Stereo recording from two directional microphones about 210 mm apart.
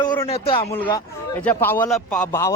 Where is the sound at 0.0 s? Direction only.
20° left (ahead or behind).